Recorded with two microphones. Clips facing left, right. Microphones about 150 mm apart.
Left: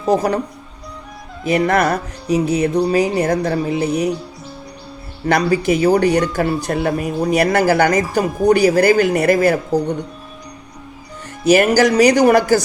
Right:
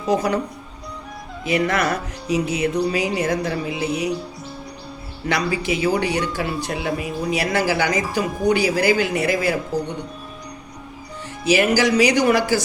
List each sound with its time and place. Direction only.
0.0 s speech: 40° left (ahead or behind)
1.5 s speech: 45° left (ahead or behind)
5.2 s speech: 45° left (ahead or behind)
11.4 s speech: 50° left (ahead or behind)